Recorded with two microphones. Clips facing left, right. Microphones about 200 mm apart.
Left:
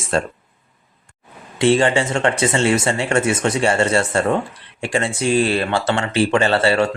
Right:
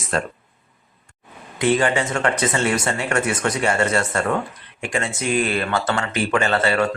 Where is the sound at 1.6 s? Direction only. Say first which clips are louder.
Left 3 dB; 30° left (ahead or behind).